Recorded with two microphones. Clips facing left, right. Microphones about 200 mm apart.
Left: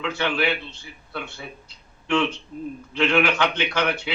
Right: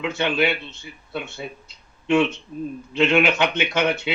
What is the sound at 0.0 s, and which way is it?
Speech, 20° right (ahead or behind).